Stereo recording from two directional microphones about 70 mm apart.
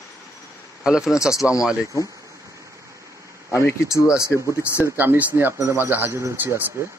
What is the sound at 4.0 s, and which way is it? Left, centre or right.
Speech, left.